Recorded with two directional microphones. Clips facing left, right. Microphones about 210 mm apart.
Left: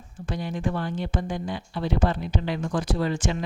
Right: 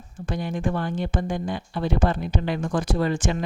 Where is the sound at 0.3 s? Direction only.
50° right (ahead or behind).